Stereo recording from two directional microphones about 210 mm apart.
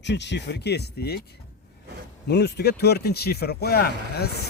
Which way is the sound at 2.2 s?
50° left (ahead or behind).